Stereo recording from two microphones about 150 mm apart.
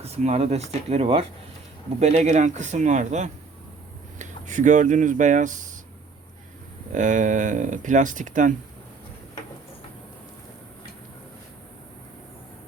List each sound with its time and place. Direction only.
0.0 s speech: 45° right (ahead or behind)
6.9 s speech: 55° right (ahead or behind)